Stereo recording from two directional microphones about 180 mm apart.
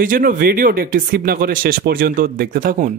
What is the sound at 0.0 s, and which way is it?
Speech, 50° right (ahead or behind).